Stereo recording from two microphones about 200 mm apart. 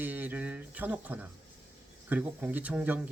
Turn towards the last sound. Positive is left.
turn(degrees=-5)  # may be behind; listen again after turning